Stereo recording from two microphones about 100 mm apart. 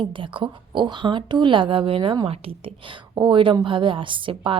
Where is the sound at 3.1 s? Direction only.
50° right (ahead or behind).